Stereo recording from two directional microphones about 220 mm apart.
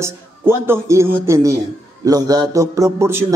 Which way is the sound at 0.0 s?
10° right (ahead or behind).